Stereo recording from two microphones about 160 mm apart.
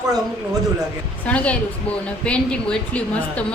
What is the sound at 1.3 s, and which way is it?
A woman's voice, 10° left (ahead or behind).